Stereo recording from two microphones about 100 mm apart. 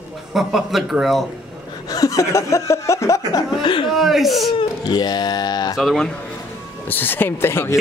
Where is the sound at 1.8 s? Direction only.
35° left (ahead or behind).